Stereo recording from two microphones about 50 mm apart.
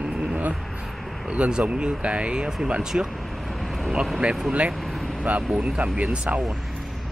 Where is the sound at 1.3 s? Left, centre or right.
Centre.